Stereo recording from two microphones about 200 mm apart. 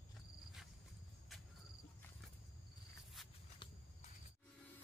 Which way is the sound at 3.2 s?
Centre (ahead or behind).